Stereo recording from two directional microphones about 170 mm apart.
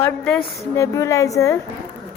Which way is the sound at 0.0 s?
15° left (ahead or behind).